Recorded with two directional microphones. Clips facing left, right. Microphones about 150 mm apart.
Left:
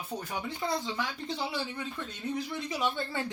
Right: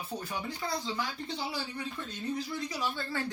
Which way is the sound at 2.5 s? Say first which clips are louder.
Left 3 dB; 20° left (ahead or behind).